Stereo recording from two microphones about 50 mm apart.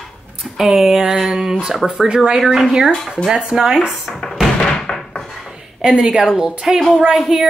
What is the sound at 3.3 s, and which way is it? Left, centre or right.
Speech, centre.